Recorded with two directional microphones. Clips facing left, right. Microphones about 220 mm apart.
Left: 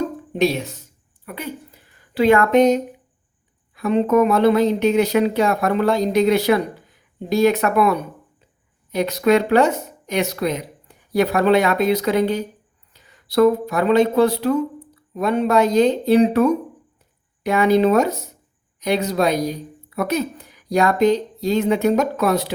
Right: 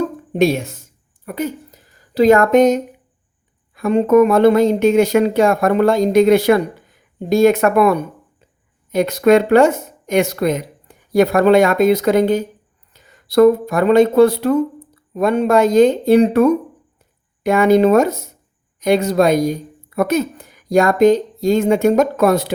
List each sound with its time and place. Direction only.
0.3 s a woman's voice: 50° right (ahead or behind)
3.8 s speech: 50° right (ahead or behind)